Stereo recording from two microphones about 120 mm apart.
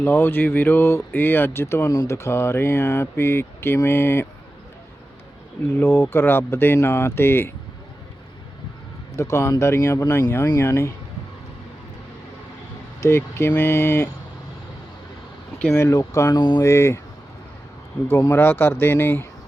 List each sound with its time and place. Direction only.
0.0 s speech: 15° left (ahead or behind)
5.7 s speech: 20° left (ahead or behind)
9.1 s speech: 25° left (ahead or behind)
13.0 s speech: 20° left (ahead or behind)
15.5 s speech: 10° left (ahead or behind)
15.8 s speech: 25° left (ahead or behind)
18.3 s speech: 20° left (ahead or behind)